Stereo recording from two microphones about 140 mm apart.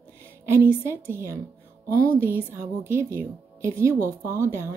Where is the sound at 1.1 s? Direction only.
20° right (ahead or behind).